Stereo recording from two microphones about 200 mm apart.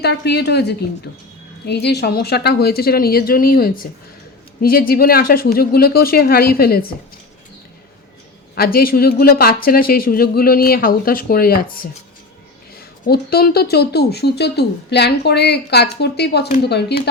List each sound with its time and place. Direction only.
0.0 s speech: 55° left (ahead or behind)
8.5 s speech: 50° left (ahead or behind)
13.1 s speech: 50° left (ahead or behind)